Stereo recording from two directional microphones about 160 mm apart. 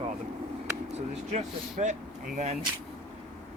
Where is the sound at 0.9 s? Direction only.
50° right (ahead or behind).